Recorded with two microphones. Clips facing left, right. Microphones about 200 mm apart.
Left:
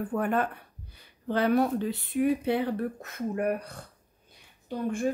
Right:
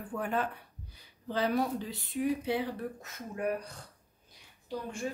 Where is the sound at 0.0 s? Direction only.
55° left (ahead or behind).